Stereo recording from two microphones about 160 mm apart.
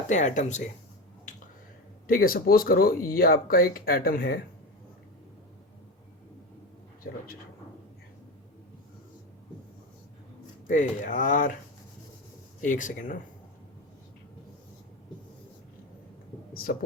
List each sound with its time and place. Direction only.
0.1 s speech: 50° left (ahead or behind)
2.0 s speech: 65° left (ahead or behind)
10.7 s speech: 50° left (ahead or behind)
12.6 s speech: 55° left (ahead or behind)